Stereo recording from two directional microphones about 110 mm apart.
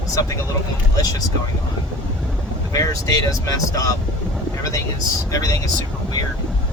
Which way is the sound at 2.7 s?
30° left (ahead or behind).